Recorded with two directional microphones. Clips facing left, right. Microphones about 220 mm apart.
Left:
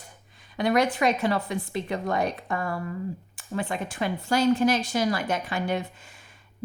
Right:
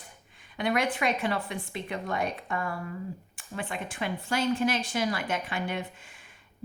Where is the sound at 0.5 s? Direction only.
40° left (ahead or behind).